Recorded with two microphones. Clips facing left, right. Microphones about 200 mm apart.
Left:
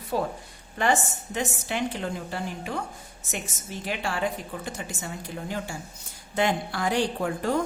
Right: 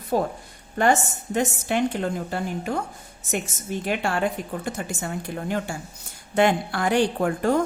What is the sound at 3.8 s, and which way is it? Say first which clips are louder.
A woman's voice: right 4 dB; 55° right (ahead or behind).